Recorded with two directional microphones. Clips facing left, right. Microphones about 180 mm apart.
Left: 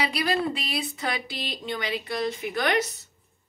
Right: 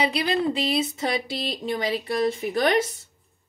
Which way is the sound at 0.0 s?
20° right (ahead or behind).